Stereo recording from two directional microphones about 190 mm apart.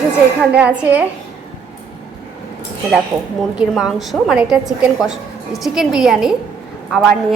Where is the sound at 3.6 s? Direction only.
5° right (ahead or behind).